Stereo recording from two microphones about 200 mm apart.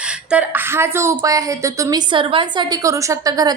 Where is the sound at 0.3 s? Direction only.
10° right (ahead or behind).